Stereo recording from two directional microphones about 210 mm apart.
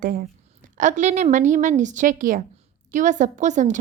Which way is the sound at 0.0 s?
45° right (ahead or behind).